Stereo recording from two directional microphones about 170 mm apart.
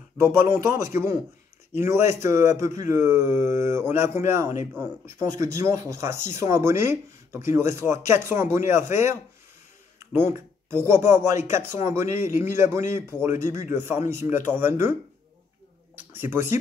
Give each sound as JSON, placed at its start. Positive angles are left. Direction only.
{"t": 0.2, "sound": "speech", "side_deg": -15}
{"t": 16.1, "sound": "speech", "side_deg": -15}